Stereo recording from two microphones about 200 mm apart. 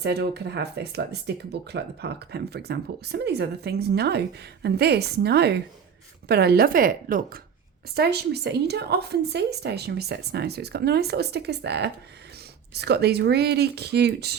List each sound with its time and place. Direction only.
0.0 s speech: 55° right (ahead or behind)